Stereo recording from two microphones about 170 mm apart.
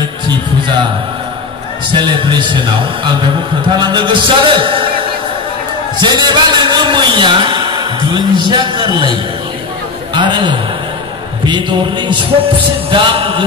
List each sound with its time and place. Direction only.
1.9 s a man's voice: 25° right (ahead or behind)
5.9 s a man's voice: 25° right (ahead or behind)
10.1 s a man's voice: 25° right (ahead or behind)